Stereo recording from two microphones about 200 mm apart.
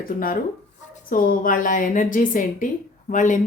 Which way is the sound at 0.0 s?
45° left (ahead or behind).